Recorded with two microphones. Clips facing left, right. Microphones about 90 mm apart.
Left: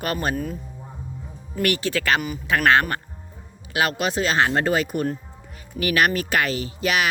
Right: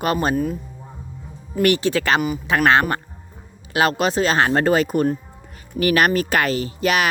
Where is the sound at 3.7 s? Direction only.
35° right (ahead or behind).